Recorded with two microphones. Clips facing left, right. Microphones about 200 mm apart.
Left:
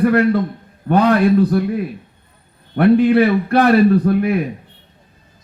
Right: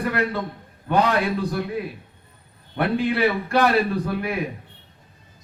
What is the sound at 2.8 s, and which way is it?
Speech, 55° left (ahead or behind).